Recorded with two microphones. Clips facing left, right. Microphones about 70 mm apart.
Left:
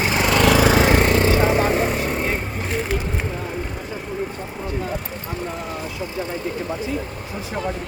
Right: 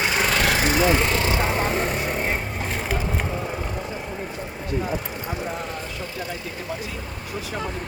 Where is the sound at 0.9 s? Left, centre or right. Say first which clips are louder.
Left 5 dB; left.